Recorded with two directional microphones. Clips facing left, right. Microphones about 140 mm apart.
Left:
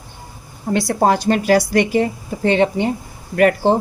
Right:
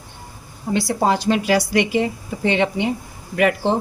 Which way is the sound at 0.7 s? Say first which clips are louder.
Left 3 dB; 50° left (ahead or behind).